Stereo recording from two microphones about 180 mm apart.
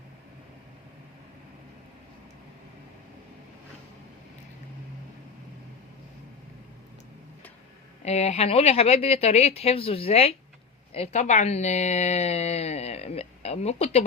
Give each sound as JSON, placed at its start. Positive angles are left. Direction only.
{"t": 8.0, "sound": "speech", "side_deg": 40}